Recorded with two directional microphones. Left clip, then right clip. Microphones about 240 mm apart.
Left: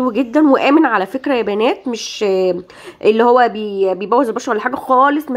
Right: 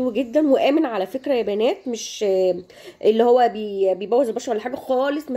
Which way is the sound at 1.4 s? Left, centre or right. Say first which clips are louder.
Left 5 dB; centre.